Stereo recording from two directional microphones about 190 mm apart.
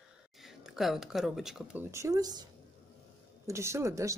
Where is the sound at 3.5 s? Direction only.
15° right (ahead or behind).